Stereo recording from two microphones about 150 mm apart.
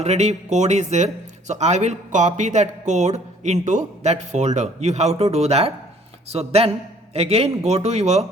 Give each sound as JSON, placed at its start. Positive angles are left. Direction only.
{"t": 0.0, "sound": "speech", "side_deg": -45}